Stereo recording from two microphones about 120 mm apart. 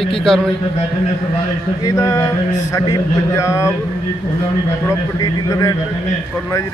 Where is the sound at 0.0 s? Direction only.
5° left (ahead or behind).